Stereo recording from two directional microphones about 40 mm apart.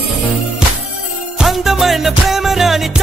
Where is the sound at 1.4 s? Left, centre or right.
Centre.